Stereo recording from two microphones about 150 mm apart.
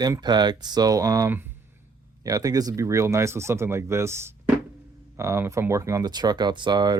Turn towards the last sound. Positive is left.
turn(degrees=-30)  # may be behind; listen again after turning